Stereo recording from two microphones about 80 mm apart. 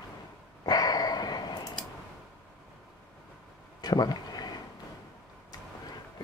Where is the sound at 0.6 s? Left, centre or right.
Left.